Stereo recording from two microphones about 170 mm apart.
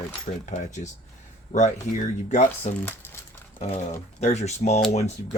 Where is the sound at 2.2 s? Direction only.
45° left (ahead or behind).